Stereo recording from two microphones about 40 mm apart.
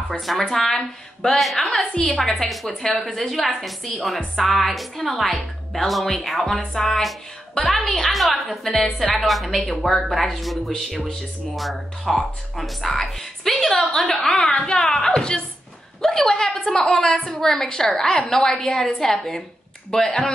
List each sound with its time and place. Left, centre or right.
0.2 s a woman's voice: centre